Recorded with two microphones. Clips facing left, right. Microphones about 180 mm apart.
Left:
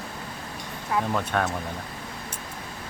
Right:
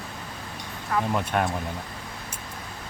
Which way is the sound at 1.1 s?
15° right (ahead or behind).